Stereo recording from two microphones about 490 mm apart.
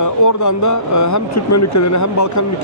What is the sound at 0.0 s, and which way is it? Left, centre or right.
Speech, left.